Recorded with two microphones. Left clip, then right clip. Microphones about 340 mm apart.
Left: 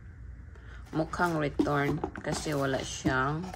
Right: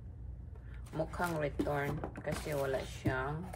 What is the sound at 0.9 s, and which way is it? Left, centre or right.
Speech, left.